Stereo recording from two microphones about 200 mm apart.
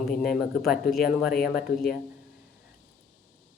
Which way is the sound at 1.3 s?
50° left (ahead or behind).